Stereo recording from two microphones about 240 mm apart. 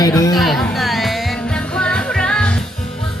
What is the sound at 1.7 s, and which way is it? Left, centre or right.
Music, centre.